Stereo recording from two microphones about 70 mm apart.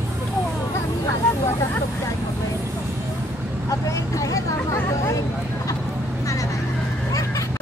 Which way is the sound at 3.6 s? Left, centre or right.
Left.